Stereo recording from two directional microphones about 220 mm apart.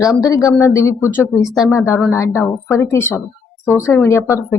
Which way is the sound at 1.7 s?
10° left (ahead or behind).